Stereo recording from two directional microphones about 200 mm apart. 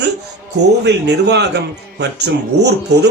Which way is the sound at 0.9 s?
55° right (ahead or behind).